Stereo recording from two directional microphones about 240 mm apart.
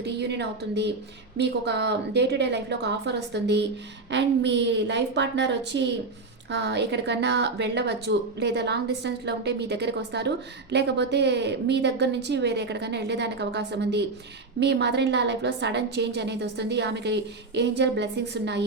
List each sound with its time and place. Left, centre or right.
0.0 s speech: right